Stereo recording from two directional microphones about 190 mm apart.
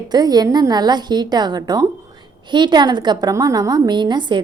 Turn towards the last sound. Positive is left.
turn(degrees=-25)  # may be behind; listen again after turning